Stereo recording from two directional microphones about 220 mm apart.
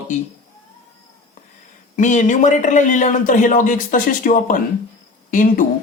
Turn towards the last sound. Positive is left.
turn(degrees=35)  # may be behind; listen again after turning